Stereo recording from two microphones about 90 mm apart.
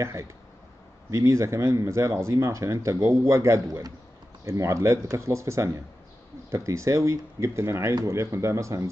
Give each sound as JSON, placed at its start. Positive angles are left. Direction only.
{"t": 0.0, "sound": "speech", "side_deg": -30}